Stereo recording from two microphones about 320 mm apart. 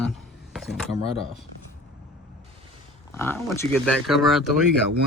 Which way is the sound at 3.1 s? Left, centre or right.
Centre.